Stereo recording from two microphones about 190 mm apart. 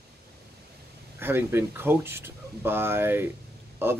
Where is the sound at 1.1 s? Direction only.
10° right (ahead or behind).